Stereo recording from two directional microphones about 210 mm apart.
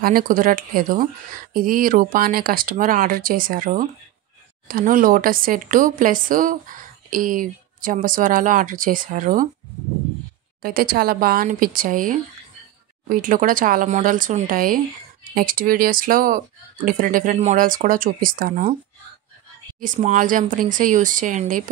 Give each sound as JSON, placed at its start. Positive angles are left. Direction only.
{"t": 0.0, "sound": "speech", "side_deg": -40}
{"t": 10.6, "sound": "speech", "side_deg": -45}
{"t": 19.8, "sound": "speech", "side_deg": -35}